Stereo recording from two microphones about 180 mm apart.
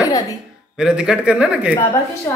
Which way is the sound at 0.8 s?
5° right (ahead or behind).